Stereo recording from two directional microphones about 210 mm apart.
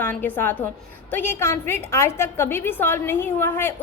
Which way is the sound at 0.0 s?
10° left (ahead or behind).